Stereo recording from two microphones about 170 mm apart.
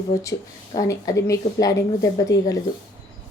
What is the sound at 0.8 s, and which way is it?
Speech, 20° left (ahead or behind).